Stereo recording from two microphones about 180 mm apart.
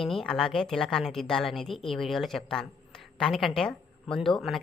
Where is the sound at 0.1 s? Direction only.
Centre (ahead or behind).